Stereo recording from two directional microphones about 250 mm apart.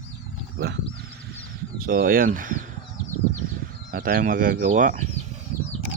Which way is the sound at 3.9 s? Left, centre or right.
Right.